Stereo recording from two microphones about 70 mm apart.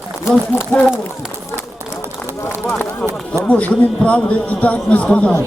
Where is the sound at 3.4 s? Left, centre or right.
Centre.